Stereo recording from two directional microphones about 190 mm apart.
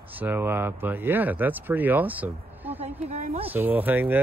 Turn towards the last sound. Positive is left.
turn(degrees=-10)  # may be behind; listen again after turning